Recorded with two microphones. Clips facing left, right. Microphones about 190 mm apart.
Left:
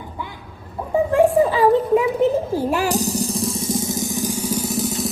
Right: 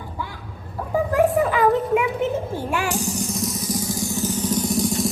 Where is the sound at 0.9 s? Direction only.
25° left (ahead or behind).